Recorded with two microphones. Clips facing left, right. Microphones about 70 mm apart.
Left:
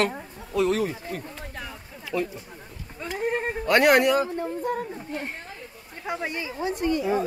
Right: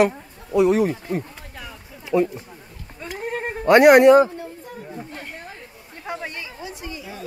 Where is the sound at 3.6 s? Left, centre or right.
Right.